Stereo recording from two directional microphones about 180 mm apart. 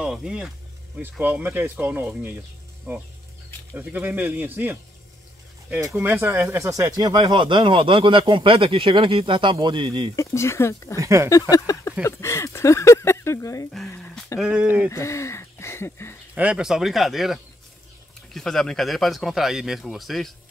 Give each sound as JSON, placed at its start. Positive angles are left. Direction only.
{"t": 0.0, "sound": "speech", "side_deg": -5}
{"t": 10.1, "sound": "speech", "side_deg": 15}
{"t": 11.0, "sound": "speech", "side_deg": -15}
{"t": 11.5, "sound": "a sound", "side_deg": 20}
{"t": 12.0, "sound": "speech", "side_deg": 15}
{"t": 13.8, "sound": "a sound", "side_deg": 10}
{"t": 14.4, "sound": "speech", "side_deg": -5}
{"t": 14.9, "sound": "speech", "side_deg": 15}
{"t": 16.3, "sound": "speech", "side_deg": -5}